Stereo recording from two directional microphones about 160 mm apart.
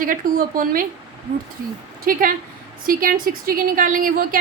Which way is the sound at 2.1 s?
60° right (ahead or behind).